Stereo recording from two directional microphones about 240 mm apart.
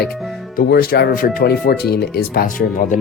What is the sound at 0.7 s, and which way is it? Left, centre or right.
Speech, left.